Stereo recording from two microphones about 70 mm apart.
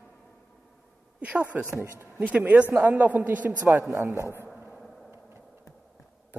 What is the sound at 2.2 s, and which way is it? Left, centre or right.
Speech, right.